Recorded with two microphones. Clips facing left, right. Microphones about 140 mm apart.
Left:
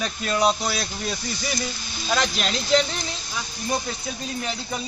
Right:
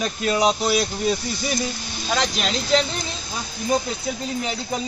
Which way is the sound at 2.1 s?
5° right (ahead or behind).